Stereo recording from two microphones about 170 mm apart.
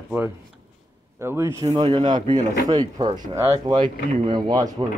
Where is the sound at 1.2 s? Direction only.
15° right (ahead or behind).